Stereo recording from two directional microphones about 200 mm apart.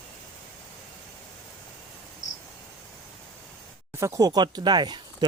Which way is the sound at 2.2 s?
35° left (ahead or behind).